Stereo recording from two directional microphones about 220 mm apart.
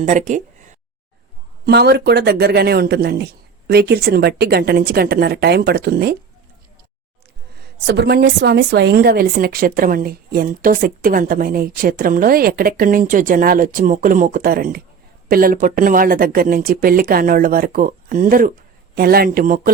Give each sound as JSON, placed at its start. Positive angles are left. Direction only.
{"t": 0.0, "sound": "speech", "side_deg": -35}
{"t": 1.6, "sound": "a woman's voice", "side_deg": -45}
{"t": 7.9, "sound": "a woman's voice", "side_deg": -45}